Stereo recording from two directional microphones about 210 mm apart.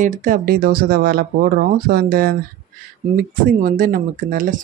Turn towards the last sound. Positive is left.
turn(degrees=-40)  # may be behind; listen again after turning